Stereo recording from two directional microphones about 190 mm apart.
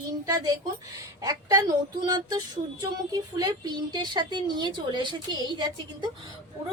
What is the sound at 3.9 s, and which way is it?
A woman's voice, 25° right (ahead or behind).